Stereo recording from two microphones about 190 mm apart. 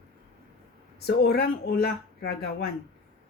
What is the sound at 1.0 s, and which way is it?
Speech, 55° left (ahead or behind).